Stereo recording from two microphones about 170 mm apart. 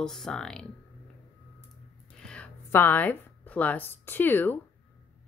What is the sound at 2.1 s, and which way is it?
A woman's voice, 5° left (ahead or behind).